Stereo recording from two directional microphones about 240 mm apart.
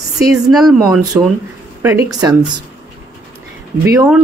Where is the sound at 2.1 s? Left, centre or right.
Centre.